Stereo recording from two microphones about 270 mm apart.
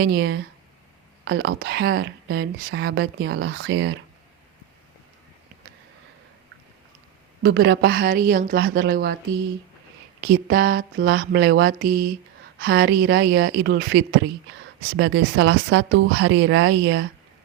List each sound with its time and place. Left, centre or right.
0.0 s speech: right
7.4 s speech: right
10.2 s a woman's voice: right